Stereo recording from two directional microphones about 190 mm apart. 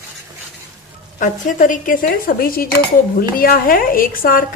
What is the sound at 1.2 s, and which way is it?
Speech, 45° left (ahead or behind).